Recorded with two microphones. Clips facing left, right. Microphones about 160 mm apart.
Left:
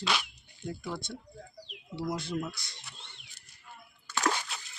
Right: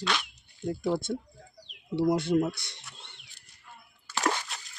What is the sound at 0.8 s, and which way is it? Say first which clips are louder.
Speech: right 10 dB; 45° right (ahead or behind).